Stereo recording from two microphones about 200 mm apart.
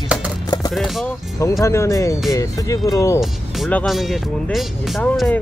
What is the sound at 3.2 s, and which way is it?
Speech, 5° left (ahead or behind).